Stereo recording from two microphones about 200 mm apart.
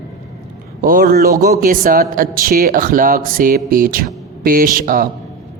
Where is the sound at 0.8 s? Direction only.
45° right (ahead or behind).